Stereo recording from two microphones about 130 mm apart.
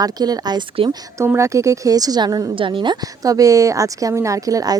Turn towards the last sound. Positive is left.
turn(degrees=-30)  # may be behind; listen again after turning